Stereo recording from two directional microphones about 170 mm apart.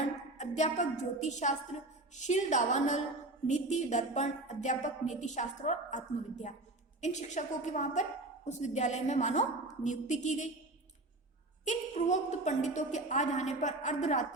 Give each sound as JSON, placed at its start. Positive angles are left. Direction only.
{"t": 0.3, "sound": "a woman's voice", "side_deg": 45}
{"t": 11.6, "sound": "a woman's voice", "side_deg": 45}